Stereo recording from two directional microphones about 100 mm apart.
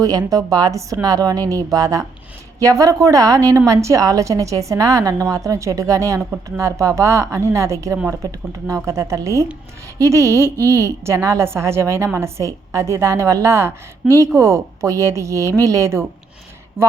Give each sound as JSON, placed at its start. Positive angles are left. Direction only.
{"t": 0.0, "sound": "a woman's voice", "side_deg": -40}